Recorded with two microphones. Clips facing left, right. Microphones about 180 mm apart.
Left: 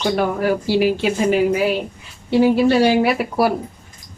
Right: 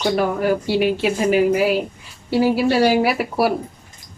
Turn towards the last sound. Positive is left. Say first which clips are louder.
# left 1 dB
turn(degrees=0)  # may be behind; listen again after turning